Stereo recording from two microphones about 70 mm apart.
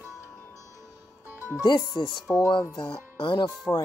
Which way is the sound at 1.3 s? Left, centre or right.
Right.